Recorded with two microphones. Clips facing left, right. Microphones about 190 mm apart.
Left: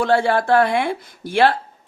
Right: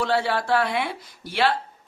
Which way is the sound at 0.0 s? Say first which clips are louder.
Left 6 dB; 50° left (ahead or behind).